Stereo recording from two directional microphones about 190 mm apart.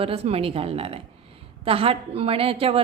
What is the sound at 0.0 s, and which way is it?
A woman's voice, 30° right (ahead or behind).